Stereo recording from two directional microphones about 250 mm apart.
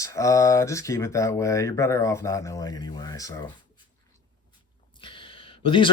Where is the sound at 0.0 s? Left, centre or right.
Centre.